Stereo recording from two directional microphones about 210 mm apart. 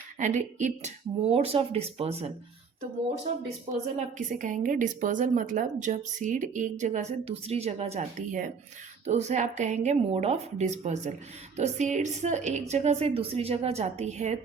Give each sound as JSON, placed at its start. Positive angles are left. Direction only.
{"t": 0.2, "sound": "speech", "side_deg": -35}
{"t": 3.9, "sound": "a woman's voice", "side_deg": -40}